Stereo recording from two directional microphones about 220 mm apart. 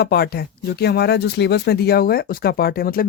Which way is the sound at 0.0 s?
45° left (ahead or behind).